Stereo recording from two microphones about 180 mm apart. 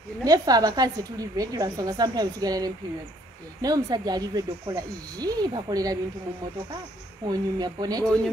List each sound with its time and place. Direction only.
0.2 s a woman's voice: 20° right (ahead or behind)
7.2 s a woman's voice: 20° right (ahead or behind)